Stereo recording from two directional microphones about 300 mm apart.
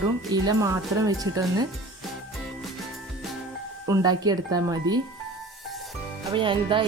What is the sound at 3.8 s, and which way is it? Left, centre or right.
Speech, centre.